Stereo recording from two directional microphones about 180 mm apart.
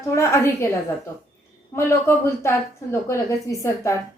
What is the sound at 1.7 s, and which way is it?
A woman's voice, 15° left (ahead or behind).